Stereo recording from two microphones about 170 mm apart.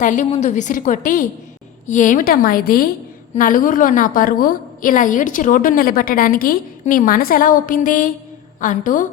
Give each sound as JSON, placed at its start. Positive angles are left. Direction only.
{"t": 0.0, "sound": "a woman's voice", "side_deg": 45}